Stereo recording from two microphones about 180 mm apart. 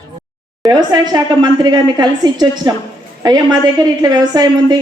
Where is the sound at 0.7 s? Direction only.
25° right (ahead or behind).